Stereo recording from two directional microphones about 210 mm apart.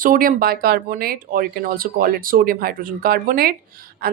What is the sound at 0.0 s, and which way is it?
A woman's voice, 40° right (ahead or behind).